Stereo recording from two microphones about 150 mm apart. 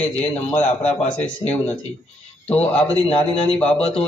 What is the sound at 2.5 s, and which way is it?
Speech, 40° left (ahead or behind).